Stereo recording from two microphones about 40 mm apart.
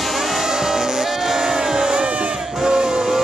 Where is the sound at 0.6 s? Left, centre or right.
Centre.